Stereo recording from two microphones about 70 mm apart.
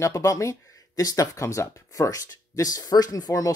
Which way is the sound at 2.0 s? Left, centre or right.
Left.